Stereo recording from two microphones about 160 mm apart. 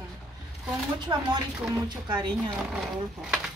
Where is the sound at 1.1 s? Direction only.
30° right (ahead or behind).